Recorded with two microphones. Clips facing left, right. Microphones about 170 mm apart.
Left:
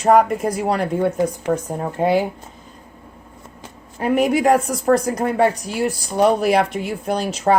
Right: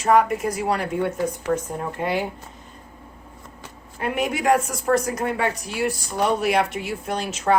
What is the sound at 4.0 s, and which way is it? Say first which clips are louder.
A woman's voice: left 7 dB; 40° left (ahead or behind).